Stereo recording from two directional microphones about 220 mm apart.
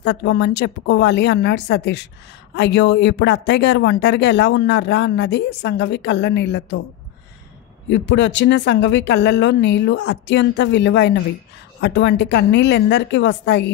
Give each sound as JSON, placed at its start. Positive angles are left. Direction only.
{"t": 0.0, "sound": "speech", "side_deg": 50}
{"t": 7.9, "sound": "speech", "side_deg": 55}